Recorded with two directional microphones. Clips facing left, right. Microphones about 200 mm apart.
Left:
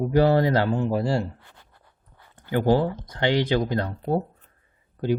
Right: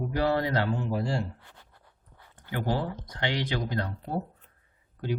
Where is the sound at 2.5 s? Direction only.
30° left (ahead or behind).